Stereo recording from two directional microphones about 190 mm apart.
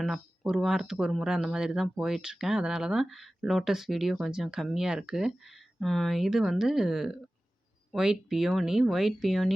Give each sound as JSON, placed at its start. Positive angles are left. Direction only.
{"t": 0.0, "sound": "speech", "side_deg": 0}